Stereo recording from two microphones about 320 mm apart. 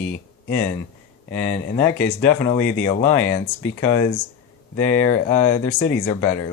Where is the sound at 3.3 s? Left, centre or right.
Centre.